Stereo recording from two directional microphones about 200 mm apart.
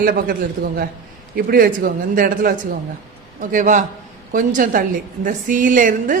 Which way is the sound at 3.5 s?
40° right (ahead or behind).